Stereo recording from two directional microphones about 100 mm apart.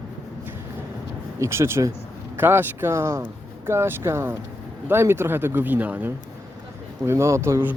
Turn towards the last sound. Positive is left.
turn(degrees=-25)  # may be behind; listen again after turning